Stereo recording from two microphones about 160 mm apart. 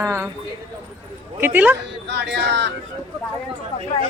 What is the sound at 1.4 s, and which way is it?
Speech, 10° right (ahead or behind).